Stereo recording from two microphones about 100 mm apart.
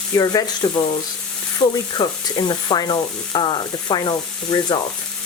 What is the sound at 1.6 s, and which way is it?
Speech, 45° left (ahead or behind).